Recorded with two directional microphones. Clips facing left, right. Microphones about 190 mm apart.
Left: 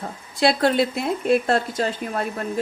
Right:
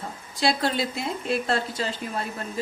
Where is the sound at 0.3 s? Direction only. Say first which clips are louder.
Left 6 dB; 60° left (ahead or behind).